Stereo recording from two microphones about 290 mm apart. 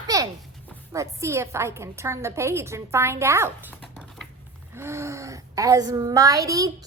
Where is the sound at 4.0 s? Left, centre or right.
Centre.